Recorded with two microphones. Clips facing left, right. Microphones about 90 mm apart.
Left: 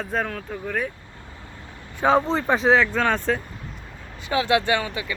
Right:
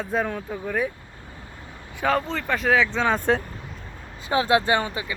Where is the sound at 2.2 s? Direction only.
30° left (ahead or behind).